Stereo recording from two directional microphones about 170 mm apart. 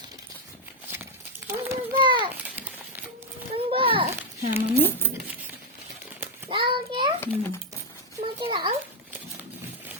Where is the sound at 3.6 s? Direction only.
30° right (ahead or behind).